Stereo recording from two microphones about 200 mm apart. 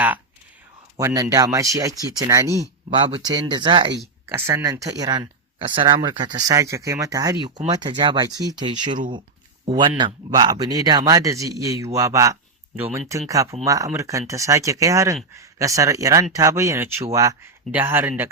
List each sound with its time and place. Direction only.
0.9 s a man's voice: 15° right (ahead or behind)